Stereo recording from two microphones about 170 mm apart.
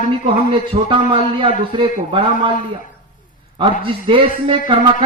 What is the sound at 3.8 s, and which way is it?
Speech, 30° right (ahead or behind).